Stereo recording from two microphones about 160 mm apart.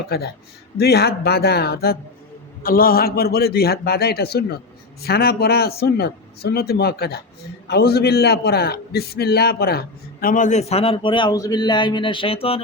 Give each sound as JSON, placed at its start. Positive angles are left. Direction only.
{"t": 0.1, "sound": "a man's voice", "side_deg": 85}
{"t": 2.6, "sound": "a man's voice", "side_deg": 65}